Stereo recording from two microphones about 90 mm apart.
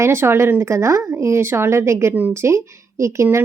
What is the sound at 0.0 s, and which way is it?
Speech, 30° right (ahead or behind).